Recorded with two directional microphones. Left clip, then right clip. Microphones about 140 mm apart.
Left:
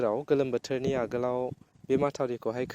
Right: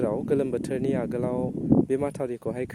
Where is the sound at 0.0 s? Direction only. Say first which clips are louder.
Right 1 dB; 50° right (ahead or behind).